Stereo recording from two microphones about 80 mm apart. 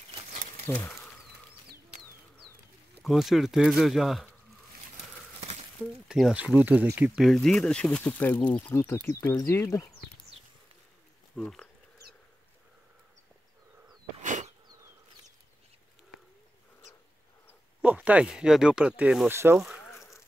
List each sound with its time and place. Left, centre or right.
0.7 s speech: left
3.0 s speech: centre
6.0 s speech: centre
6.3 s speech: centre
7.2 s speech: centre
9.0 s speech: left
11.3 s speech: centre
17.8 s speech: centre
19.2 s speech: right